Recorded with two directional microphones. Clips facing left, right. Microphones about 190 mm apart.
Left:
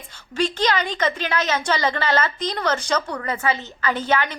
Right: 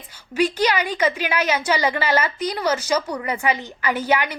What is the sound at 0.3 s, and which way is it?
A woman's voice, 10° right (ahead or behind).